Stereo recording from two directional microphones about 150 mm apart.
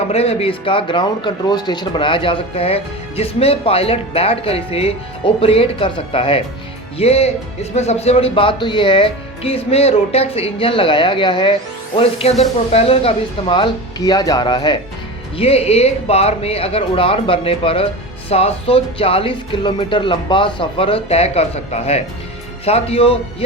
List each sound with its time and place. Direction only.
0.1 s speech: 40° left (ahead or behind)
11.9 s speech: 40° left (ahead or behind)
15.4 s speech: 40° left (ahead or behind)